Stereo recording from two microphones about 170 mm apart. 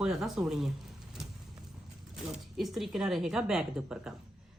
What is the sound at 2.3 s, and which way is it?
Speech, centre (ahead or behind).